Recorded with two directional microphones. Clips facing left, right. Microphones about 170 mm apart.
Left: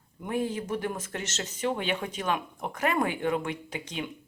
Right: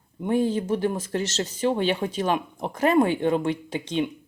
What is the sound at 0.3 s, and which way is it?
Speech, 30° right (ahead or behind).